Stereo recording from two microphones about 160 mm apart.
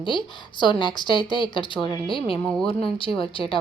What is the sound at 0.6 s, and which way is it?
A woman's voice, 30° left (ahead or behind).